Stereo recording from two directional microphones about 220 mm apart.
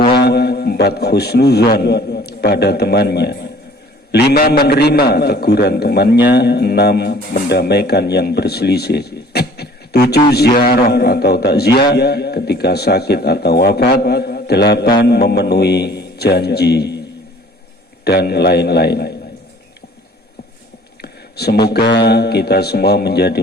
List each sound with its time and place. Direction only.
0.1 s a man's voice: 45° left (ahead or behind)
18.0 s a man's voice: 45° left (ahead or behind)
21.0 s a man's voice: 45° left (ahead or behind)